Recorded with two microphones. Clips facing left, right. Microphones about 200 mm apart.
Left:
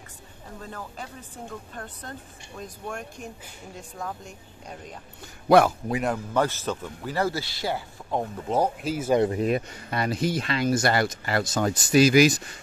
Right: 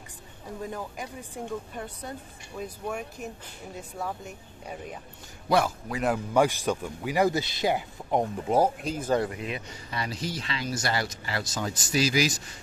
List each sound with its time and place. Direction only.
0.6 s speech: 15° right (ahead or behind)
6.0 s speech: 10° right (ahead or behind)
8.8 s speech: 10° left (ahead or behind)
9.4 s speech: 50° left (ahead or behind)